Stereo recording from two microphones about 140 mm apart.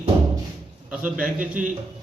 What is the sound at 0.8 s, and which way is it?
Speech, 10° right (ahead or behind).